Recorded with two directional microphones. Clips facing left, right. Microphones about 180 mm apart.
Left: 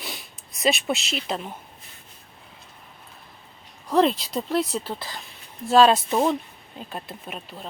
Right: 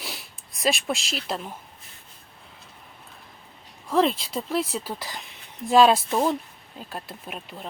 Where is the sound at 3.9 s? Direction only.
Centre (ahead or behind).